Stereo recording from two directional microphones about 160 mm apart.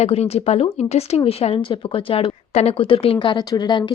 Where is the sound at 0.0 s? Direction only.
40° left (ahead or behind).